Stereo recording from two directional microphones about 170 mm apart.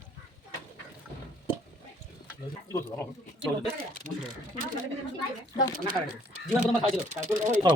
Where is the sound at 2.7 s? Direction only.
15° left (ahead or behind).